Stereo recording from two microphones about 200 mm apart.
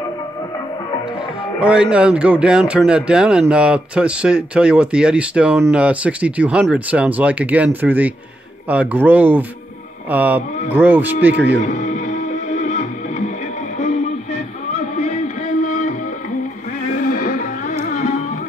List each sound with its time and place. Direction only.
1.6 s speech: 5° right (ahead or behind)
11.3 s speech: 60° right (ahead or behind)
11.6 s music: 35° left (ahead or behind)
16.9 s music: 45° left (ahead or behind)